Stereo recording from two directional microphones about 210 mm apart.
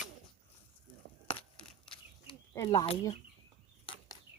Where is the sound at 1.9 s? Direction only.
20° left (ahead or behind).